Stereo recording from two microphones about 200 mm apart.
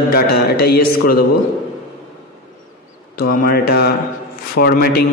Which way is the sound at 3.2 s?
45° left (ahead or behind).